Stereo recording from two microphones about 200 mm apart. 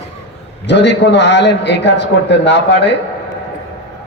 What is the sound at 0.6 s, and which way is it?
Speech, 60° left (ahead or behind).